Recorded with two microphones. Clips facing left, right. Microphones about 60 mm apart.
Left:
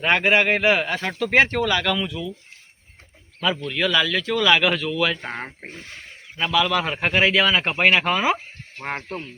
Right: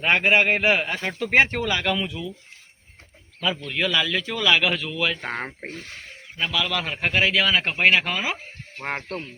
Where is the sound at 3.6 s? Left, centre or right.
Centre.